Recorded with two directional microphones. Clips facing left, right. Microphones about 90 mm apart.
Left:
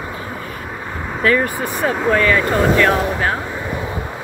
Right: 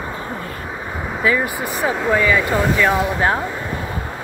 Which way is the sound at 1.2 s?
10° right (ahead or behind).